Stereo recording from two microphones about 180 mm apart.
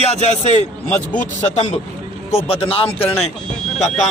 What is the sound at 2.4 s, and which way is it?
Speech, 35° left (ahead or behind).